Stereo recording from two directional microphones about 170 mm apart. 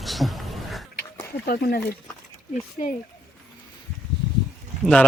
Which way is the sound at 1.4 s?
65° left (ahead or behind).